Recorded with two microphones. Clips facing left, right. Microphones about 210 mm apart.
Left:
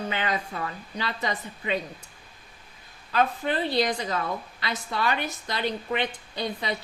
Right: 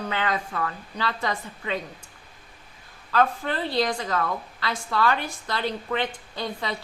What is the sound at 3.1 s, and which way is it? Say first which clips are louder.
Speech: right 1 dB; 20° left (ahead or behind).